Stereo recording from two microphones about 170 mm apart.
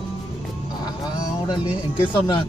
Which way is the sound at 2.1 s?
25° left (ahead or behind).